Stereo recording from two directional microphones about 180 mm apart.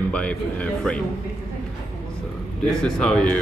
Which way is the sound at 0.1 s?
5° left (ahead or behind).